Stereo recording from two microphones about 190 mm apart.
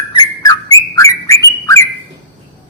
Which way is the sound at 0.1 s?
20° left (ahead or behind).